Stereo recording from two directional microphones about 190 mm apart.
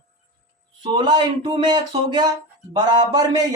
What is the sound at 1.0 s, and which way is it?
Speech, 20° right (ahead or behind).